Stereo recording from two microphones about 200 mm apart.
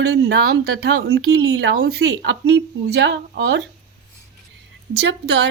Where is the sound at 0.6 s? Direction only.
50° right (ahead or behind).